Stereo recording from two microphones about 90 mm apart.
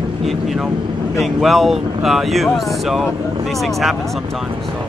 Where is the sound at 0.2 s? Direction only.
Centre (ahead or behind).